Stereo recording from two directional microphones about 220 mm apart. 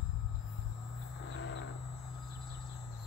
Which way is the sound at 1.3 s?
55° left (ahead or behind).